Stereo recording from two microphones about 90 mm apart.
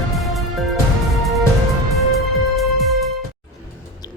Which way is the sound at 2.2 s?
Centre (ahead or behind).